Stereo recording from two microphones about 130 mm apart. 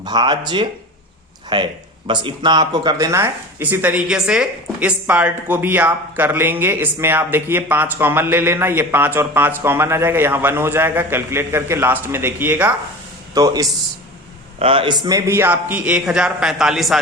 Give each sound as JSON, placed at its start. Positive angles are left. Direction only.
{"t": 0.0, "sound": "speech", "side_deg": -35}
{"t": 3.1, "sound": "speech", "side_deg": -15}
{"t": 13.3, "sound": "speech", "side_deg": -30}
{"t": 14.6, "sound": "a man's voice", "side_deg": -45}
{"t": 15.0, "sound": "speech", "side_deg": -20}